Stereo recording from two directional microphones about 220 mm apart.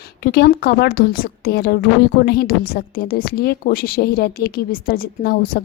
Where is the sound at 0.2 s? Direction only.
45° left (ahead or behind).